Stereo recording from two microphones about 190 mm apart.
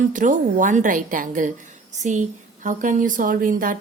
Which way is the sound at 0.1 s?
45° right (ahead or behind).